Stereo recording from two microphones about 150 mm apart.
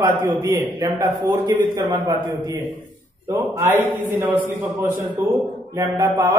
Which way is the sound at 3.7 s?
10° right (ahead or behind).